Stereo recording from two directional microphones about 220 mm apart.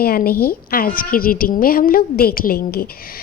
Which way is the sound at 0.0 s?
45° left (ahead or behind).